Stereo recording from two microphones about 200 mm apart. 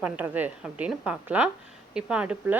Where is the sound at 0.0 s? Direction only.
10° right (ahead or behind).